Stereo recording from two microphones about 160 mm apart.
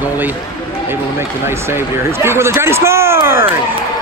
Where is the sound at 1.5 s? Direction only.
15° right (ahead or behind).